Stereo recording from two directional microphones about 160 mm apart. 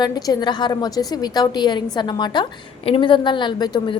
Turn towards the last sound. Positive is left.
turn(degrees=25)  # may be behind; listen again after turning